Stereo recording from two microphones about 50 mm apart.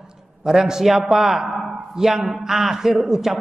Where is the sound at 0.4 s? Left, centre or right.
Centre.